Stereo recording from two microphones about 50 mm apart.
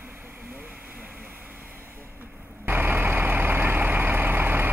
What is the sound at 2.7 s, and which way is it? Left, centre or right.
Vehicle, right.